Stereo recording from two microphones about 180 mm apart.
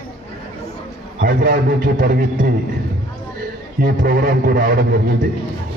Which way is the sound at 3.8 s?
55° right (ahead or behind).